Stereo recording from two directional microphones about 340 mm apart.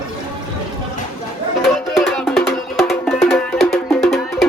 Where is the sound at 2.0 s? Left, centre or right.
Centre.